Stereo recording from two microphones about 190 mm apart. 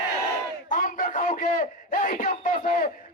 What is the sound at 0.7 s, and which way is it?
Speech, 45° left (ahead or behind).